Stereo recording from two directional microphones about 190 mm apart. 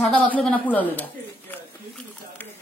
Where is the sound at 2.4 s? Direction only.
10° left (ahead or behind).